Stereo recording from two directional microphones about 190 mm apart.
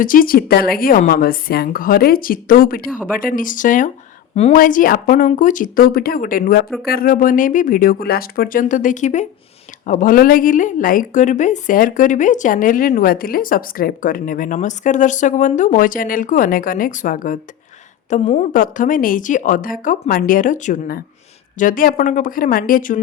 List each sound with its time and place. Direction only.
0.0 s a woman's voice: 50° left (ahead or behind)